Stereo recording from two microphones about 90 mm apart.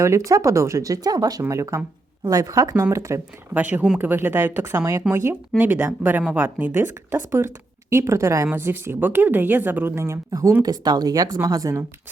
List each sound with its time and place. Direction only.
0.0 s speech: 35° right (ahead or behind)
1.4 s speech: 35° right (ahead or behind)
3.5 s a woman's voice: 20° right (ahead or behind)
10.6 s speech: 50° right (ahead or behind)